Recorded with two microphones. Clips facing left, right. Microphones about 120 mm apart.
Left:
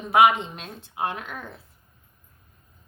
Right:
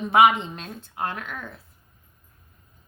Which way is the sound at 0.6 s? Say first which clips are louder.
Left 1 dB; 10° left (ahead or behind).